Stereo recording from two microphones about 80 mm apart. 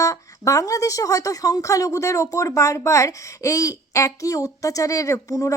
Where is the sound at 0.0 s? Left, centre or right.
Left.